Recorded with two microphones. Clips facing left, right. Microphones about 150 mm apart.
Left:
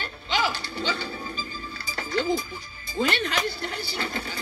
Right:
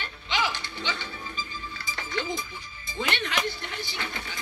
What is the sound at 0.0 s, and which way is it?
Speech, 40° left (ahead or behind).